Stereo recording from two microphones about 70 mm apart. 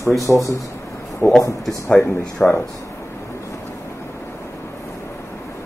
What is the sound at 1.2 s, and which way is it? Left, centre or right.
Speech, left.